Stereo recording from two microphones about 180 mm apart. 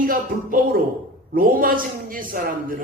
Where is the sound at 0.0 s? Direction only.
50° right (ahead or behind).